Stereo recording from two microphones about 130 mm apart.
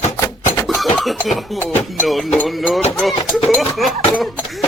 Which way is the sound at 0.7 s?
Centre (ahead or behind).